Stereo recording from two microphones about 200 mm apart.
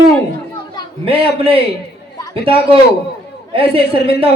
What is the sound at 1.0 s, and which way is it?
A man's voice, 30° right (ahead or behind).